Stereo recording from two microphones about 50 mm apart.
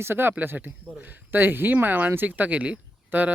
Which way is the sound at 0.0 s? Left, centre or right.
Right.